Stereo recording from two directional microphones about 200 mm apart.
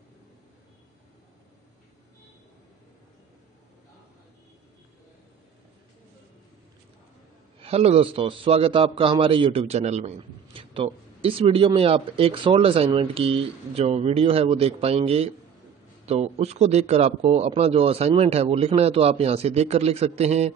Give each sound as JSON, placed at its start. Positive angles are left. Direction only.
{"t": 7.6, "sound": "a man's voice", "side_deg": -30}